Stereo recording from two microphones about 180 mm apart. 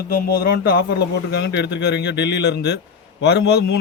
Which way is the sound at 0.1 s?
55° left (ahead or behind).